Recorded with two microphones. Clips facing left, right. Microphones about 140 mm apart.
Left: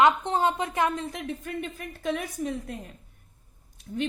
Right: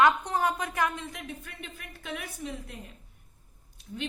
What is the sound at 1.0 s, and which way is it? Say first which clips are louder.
Speech: left 6 dB; 40° left (ahead or behind).